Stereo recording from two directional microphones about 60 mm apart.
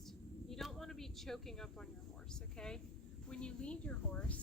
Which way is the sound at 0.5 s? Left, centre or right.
Centre.